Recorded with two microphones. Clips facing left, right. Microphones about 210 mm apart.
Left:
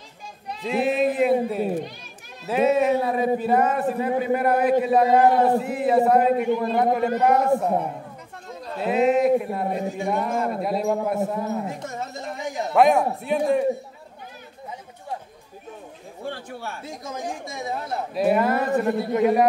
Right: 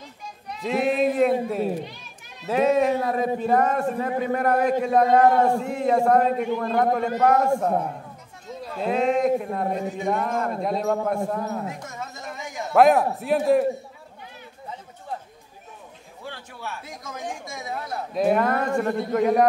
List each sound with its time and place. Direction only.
0.7 s a man's voice: centre (ahead or behind)
12.7 s a man's voice: centre (ahead or behind)
16.3 s a man's voice: 50° left (ahead or behind)
17.5 s speech: 25° left (ahead or behind)
18.1 s a man's voice: 5° left (ahead or behind)